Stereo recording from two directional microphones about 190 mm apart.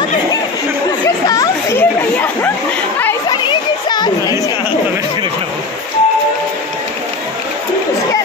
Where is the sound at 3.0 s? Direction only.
10° left (ahead or behind).